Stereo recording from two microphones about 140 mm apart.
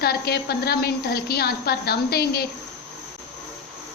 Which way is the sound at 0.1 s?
90° left.